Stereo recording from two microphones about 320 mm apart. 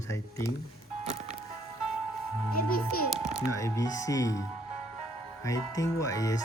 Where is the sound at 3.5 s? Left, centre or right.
Centre.